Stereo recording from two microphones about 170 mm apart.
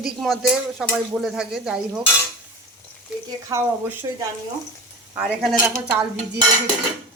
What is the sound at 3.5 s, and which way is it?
Speech, 20° right (ahead or behind).